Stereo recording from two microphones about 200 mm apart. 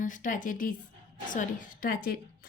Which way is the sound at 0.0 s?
40° left (ahead or behind).